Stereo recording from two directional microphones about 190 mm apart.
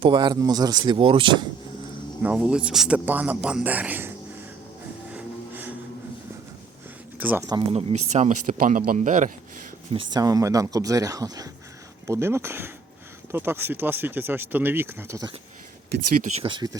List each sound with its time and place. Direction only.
0.0 s speech: 25° right (ahead or behind)
2.2 s speech: 5° right (ahead or behind)
5.1 s music: 10° right (ahead or behind)
7.2 s speech: 10° right (ahead or behind)
7.7 s speech: 30° right (ahead or behind)
10.1 s speech: 20° right (ahead or behind)
16.2 s speech: 25° right (ahead or behind)